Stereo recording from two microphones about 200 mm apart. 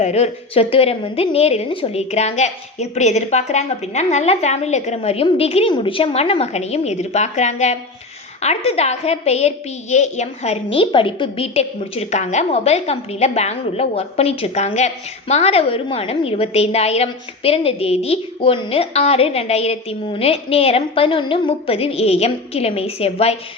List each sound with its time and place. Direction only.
0.0 s a woman's voice: 35° left (ahead or behind)